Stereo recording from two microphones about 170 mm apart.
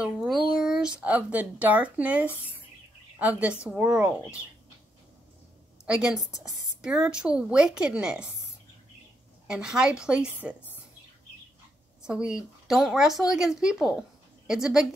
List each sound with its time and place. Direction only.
0.0 s a woman's voice: centre (ahead or behind)
5.9 s a woman's voice: 5° right (ahead or behind)
9.5 s a woman's voice: 5° right (ahead or behind)
12.0 s a woman's voice: 5° right (ahead or behind)